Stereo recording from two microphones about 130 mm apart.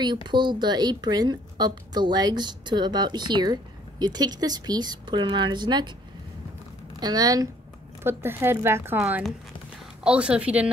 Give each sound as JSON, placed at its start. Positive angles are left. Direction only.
{"t": 0.0, "sound": "a woman's voice", "side_deg": -35}
{"t": 7.0, "sound": "speech", "side_deg": -30}
{"t": 8.0, "sound": "speech", "side_deg": -20}
{"t": 10.0, "sound": "a woman's voice", "side_deg": -10}